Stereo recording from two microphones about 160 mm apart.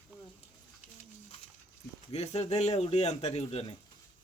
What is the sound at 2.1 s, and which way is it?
Speech, 40° left (ahead or behind).